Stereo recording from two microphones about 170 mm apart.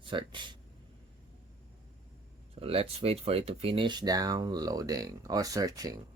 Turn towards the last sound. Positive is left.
turn(degrees=-20)  # may be behind; listen again after turning